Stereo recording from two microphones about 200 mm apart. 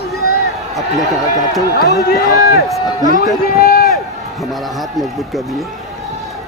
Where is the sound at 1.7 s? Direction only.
55° left (ahead or behind).